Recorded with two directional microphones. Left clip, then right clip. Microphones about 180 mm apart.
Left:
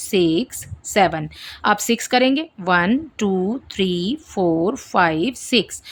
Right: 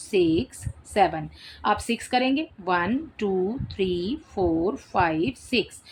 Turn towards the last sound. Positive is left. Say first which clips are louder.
# left 6 dB
turn(degrees=45)  # may be behind; listen again after turning